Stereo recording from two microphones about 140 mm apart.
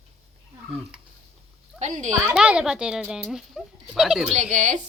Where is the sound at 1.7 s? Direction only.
55° right (ahead or behind).